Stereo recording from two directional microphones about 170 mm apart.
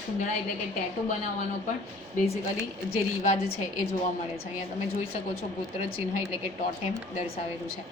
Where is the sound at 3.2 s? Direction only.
45° left (ahead or behind).